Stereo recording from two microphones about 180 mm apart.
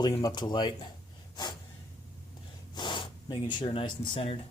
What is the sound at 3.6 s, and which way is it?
Speech, 30° left (ahead or behind).